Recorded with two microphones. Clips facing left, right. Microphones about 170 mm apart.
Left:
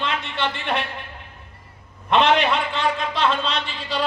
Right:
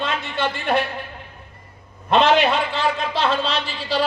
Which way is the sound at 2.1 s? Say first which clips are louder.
Right 2 dB; 35° right (ahead or behind).